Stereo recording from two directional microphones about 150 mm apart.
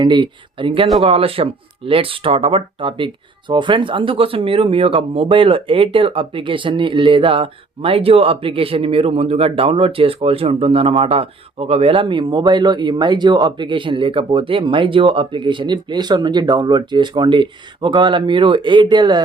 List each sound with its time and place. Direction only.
0.0 s speech: 30° right (ahead or behind)